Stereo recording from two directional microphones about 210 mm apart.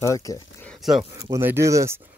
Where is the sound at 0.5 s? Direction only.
5° left (ahead or behind).